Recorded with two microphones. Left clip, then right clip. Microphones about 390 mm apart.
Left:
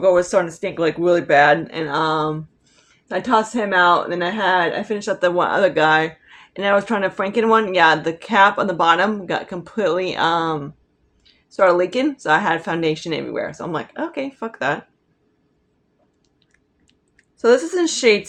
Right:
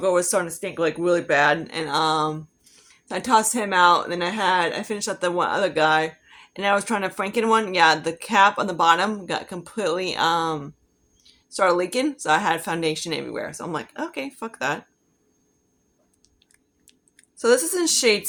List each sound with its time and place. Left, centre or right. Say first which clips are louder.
0.0 s a woman's voice: left 6 dB; right
16.8 s clicking: right 2 dB; right